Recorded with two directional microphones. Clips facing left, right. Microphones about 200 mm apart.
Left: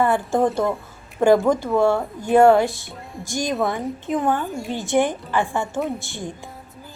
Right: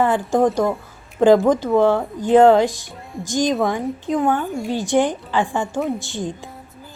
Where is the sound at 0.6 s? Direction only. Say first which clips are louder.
Right 2 dB; centre (ahead or behind).